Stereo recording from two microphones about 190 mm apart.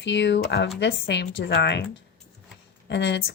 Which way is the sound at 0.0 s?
70° left (ahead or behind).